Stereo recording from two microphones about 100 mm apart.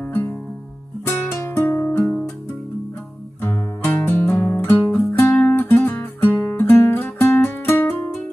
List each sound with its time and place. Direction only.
0.0 s music: 20° left (ahead or behind)
3.8 s music: 20° left (ahead or behind)